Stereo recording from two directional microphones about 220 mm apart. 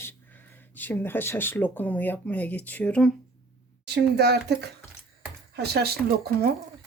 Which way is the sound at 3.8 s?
50° right (ahead or behind).